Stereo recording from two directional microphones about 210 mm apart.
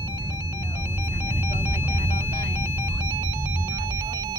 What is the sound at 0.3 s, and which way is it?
Music, 15° right (ahead or behind).